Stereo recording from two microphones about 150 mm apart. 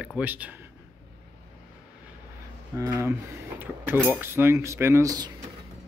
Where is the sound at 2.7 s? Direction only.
20° right (ahead or behind).